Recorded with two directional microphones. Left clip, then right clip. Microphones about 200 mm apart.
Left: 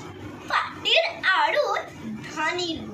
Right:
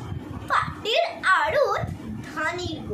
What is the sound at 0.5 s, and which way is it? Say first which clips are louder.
Children playing: left 1 dB; 15° right (ahead or behind).